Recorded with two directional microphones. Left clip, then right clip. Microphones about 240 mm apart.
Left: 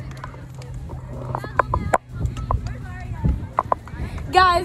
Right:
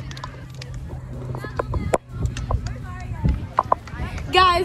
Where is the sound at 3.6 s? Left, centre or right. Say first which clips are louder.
Right 1 dB; centre.